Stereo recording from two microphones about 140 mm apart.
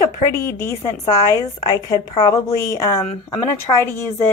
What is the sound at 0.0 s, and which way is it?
A woman's voice, 20° left (ahead or behind).